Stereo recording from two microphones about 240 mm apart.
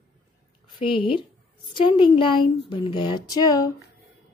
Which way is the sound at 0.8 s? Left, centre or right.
Left.